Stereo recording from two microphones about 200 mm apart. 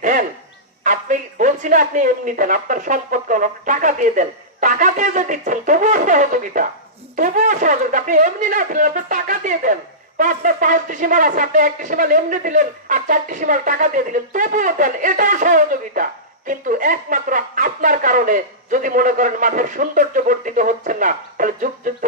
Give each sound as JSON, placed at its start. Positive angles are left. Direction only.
{"t": 0.0, "sound": "fowl", "side_deg": -40}
{"t": 0.8, "sound": "speech", "side_deg": -40}